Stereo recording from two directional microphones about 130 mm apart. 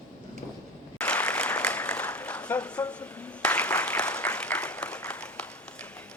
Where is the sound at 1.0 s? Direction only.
10° left (ahead or behind).